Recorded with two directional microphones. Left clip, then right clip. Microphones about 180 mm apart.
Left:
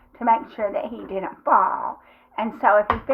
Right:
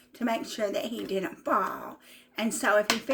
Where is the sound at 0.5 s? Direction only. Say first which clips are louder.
Left 5 dB; 30° right (ahead or behind).